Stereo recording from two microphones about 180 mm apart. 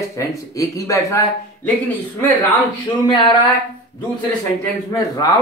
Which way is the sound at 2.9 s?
30° left (ahead or behind).